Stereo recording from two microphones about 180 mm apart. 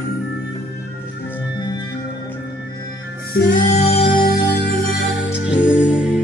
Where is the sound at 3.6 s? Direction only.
35° left (ahead or behind).